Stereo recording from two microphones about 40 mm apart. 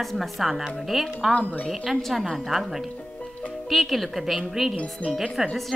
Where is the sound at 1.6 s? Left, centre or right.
Centre.